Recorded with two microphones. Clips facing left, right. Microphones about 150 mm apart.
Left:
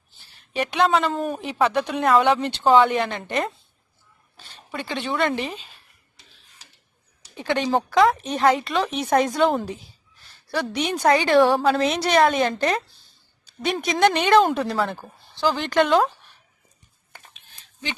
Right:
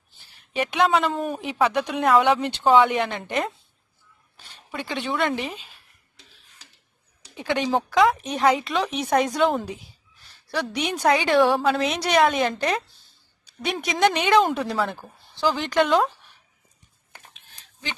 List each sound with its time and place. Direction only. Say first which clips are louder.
0.5 s a woman's voice: left 1 dB; 5° right (ahead or behind)
2.9 s speech: left 1 dB; 10° right (ahead or behind)
4.7 s speech: left 1 dB; 10° right (ahead or behind)
7.3 s a woman's voice: left 1 dB; 5° right (ahead or behind)